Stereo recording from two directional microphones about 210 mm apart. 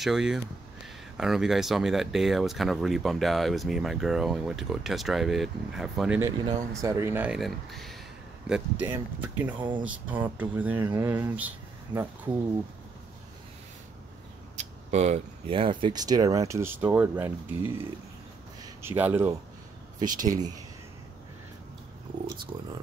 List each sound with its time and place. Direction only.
0.0 s speech: centre (ahead or behind)
9.6 s speech: 20° right (ahead or behind)
9.8 s speech: 10° right (ahead or behind)
14.6 s speech: 35° right (ahead or behind); by 17.3 s 10° right (ahead or behind)
18.6 s speech: 10° right (ahead or behind)
20.0 s speech: 40° right (ahead or behind)
20.2 s speech: 20° right (ahead or behind)